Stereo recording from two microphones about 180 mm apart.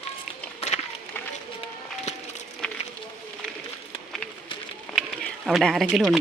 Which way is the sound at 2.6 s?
5° left (ahead or behind).